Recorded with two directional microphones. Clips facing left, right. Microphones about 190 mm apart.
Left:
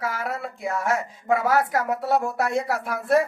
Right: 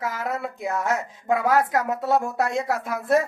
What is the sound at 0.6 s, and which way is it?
Speech, 20° right (ahead or behind).